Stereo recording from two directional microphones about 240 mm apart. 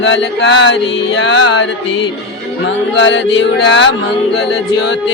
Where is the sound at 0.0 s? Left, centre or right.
Left.